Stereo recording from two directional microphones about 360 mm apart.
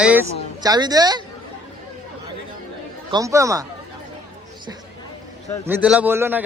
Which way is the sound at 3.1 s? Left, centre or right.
Centre.